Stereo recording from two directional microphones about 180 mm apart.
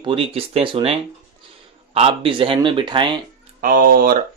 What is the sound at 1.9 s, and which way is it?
Speech, 30° right (ahead or behind).